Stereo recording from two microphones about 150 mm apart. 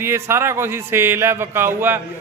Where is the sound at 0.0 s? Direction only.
15° right (ahead or behind).